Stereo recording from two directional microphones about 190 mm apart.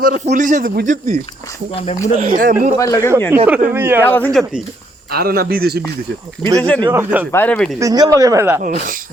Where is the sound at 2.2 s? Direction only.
45° right (ahead or behind).